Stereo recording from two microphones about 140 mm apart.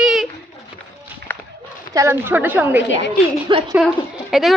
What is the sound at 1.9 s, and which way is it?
Speech, 20° right (ahead or behind).